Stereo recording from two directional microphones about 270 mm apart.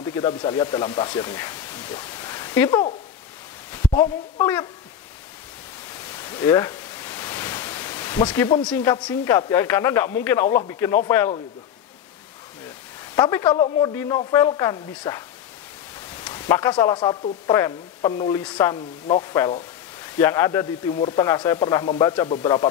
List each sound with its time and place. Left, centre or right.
0.0 s speech: centre
5.9 s pink noise: centre
8.6 s speech: centre
13.1 s speech: centre